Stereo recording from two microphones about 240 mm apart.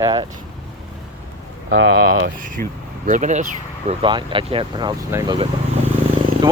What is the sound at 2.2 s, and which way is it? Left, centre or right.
Speech, right.